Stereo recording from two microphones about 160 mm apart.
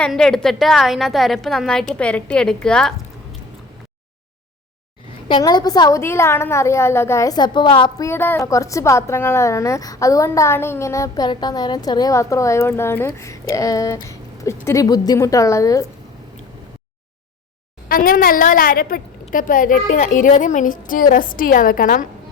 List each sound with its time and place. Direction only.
0.0 s a woman's voice: 5° left (ahead or behind)
5.3 s a woman's voice: 25° left (ahead or behind)
8.0 s a woman's voice: 15° left (ahead or behind)
17.8 s a woman's voice: 65° left (ahead or behind)